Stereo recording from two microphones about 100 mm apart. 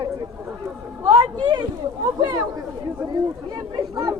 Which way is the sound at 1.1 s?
45° right (ahead or behind).